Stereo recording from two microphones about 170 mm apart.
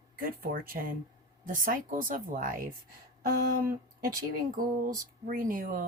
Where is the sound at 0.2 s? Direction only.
55° right (ahead or behind).